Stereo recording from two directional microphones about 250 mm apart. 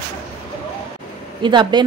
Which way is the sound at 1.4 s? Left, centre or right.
Centre.